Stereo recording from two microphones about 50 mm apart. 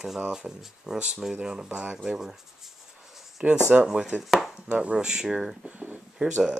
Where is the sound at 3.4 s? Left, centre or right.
Right.